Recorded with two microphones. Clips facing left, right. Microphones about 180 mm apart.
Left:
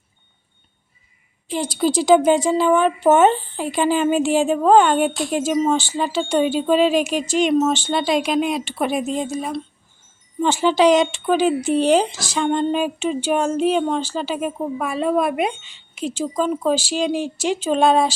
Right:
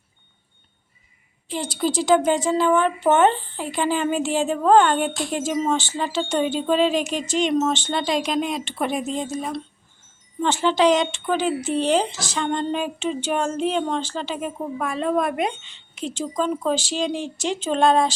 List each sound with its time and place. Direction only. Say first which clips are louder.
1.5 s a woman's voice: left 4 dB; 15° left (ahead or behind)